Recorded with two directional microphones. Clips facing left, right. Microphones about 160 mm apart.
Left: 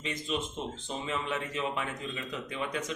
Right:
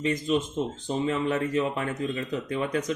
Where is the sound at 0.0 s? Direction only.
45° right (ahead or behind).